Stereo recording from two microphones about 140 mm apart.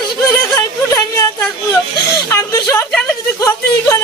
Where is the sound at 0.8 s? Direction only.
25° left (ahead or behind).